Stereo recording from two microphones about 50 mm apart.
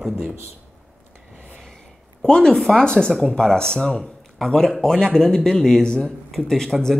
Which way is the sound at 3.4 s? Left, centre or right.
Centre.